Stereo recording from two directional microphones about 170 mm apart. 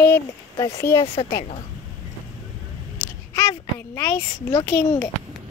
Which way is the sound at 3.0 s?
15° left (ahead or behind).